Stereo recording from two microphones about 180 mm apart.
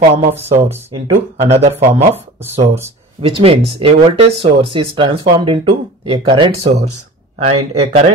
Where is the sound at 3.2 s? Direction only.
30° right (ahead or behind).